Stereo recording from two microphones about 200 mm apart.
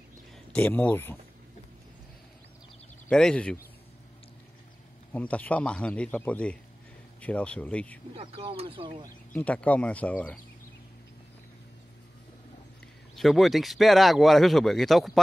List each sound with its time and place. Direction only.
0.5 s a man's voice: 10° left (ahead or behind)
3.1 s speech: 5° left (ahead or behind)
5.1 s a man's voice: 5° left (ahead or behind)
8.2 s speech: 30° right (ahead or behind)
9.3 s a man's voice: 5° left (ahead or behind)
13.1 s speech: centre (ahead or behind)